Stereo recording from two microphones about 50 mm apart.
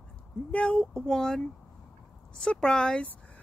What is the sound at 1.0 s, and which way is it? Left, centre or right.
Speech, centre.